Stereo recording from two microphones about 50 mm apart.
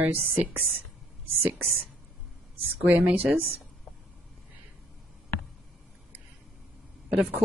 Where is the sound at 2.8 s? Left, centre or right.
Right.